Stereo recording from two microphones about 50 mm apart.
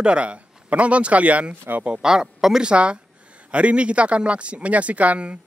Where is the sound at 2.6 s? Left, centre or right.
Right.